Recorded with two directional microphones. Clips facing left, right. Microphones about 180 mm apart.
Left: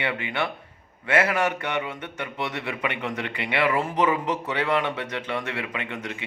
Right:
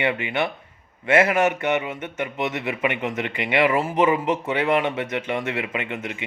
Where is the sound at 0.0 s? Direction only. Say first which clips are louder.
Right 4 dB; 15° right (ahead or behind).